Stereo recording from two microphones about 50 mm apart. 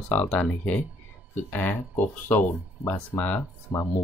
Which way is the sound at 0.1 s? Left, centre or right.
Left.